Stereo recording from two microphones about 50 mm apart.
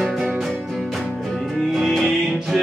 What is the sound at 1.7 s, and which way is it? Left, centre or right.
Music, centre.